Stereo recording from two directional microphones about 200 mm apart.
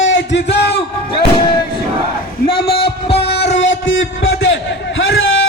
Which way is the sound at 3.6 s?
70° left (ahead or behind).